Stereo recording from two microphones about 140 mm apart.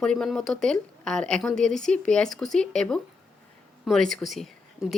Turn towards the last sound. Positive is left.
turn(degrees=0)  # may be behind; listen again after turning